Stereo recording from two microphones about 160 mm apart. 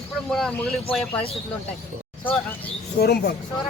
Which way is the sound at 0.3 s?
5° left (ahead or behind).